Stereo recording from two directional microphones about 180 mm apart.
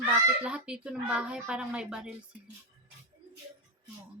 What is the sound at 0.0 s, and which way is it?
Speech, 5° right (ahead or behind).